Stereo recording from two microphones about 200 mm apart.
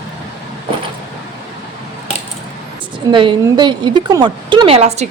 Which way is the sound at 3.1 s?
25° right (ahead or behind).